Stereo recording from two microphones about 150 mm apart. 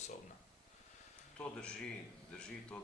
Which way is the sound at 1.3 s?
5° left (ahead or behind).